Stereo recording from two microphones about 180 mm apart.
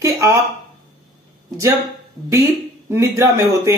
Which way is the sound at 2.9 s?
15° right (ahead or behind).